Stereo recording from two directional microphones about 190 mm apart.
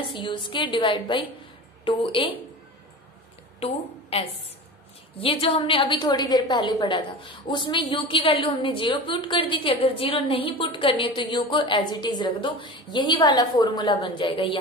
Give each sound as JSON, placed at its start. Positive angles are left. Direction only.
{"t": 0.1, "sound": "a woman's voice", "side_deg": 25}
{"t": 3.5, "sound": "a woman's voice", "side_deg": 30}